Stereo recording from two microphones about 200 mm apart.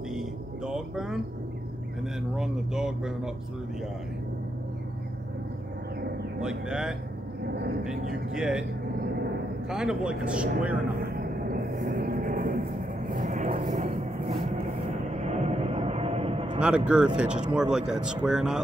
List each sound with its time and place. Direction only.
0.1 s vehicle: 5° right (ahead or behind)
2.3 s speech: 5° right (ahead or behind)
6.4 s speech: 5° right (ahead or behind)
8.3 s speech: 5° right (ahead or behind)
9.7 s speech: 5° right (ahead or behind)
11.0 s vehicle: 50° right (ahead or behind); by 16.5 s 30° right (ahead or behind)
16.5 s speech: 5° right (ahead or behind)